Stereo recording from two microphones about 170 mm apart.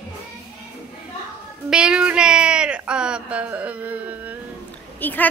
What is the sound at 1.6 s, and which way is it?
Speech, 5° right (ahead or behind).